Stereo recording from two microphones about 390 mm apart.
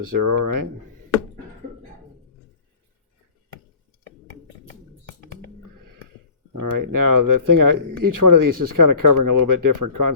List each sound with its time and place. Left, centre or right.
0.0 s speech: right
6.5 s speech: right